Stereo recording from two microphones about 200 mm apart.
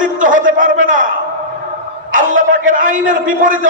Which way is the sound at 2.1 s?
40° right (ahead or behind).